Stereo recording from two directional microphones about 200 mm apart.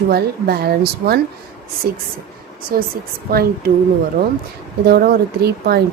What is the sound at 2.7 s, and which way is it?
Speech, 50° right (ahead or behind).